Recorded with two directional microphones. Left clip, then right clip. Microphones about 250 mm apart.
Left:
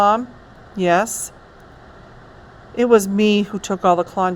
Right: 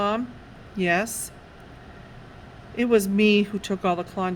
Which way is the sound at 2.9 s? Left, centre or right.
Left.